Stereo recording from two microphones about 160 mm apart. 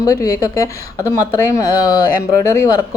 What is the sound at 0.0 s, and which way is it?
Speech, 20° left (ahead or behind).